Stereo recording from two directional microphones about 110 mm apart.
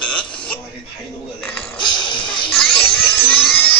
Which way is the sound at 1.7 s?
45° left (ahead or behind).